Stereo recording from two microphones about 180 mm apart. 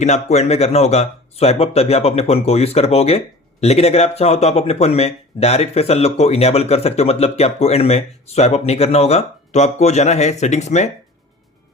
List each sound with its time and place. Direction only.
0.0 s speech: 40° left (ahead or behind)